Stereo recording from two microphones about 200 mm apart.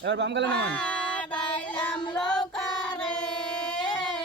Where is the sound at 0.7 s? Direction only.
5° left (ahead or behind).